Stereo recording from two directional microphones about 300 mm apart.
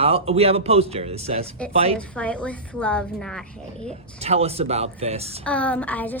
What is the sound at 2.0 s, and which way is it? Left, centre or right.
A woman's voice, centre.